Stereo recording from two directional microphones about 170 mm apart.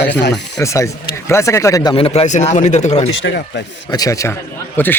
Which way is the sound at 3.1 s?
90° left.